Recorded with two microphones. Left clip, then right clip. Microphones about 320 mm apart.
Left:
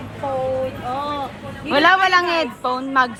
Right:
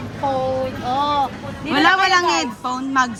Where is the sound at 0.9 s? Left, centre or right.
Right.